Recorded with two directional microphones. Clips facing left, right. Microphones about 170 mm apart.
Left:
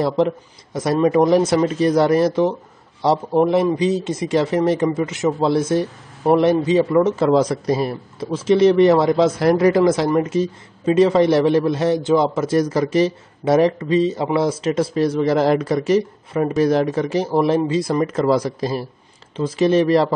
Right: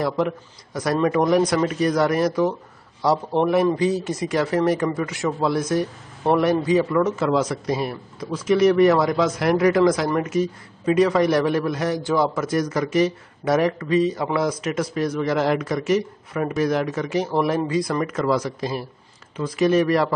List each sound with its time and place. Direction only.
0.0 s speech: 30° left (ahead or behind)